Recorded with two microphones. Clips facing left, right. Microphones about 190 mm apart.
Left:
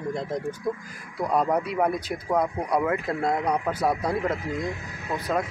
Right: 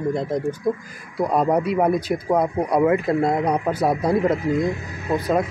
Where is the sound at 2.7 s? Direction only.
15° right (ahead or behind).